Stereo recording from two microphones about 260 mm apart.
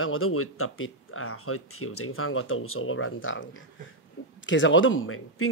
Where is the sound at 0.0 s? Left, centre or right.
Left.